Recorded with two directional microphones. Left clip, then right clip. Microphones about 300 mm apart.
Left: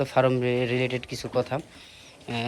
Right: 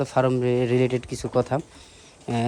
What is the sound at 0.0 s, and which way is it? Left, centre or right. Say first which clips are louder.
Speech: right 1 dB; centre.